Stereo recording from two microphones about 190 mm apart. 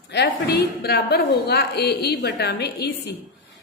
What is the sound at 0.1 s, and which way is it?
A woman's voice, 60° left (ahead or behind).